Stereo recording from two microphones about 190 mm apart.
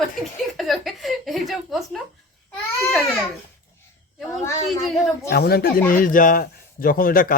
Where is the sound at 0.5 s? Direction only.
Centre (ahead or behind).